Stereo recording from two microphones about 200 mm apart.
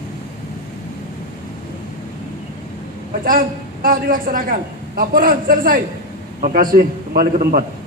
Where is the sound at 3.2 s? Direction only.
45° right (ahead or behind).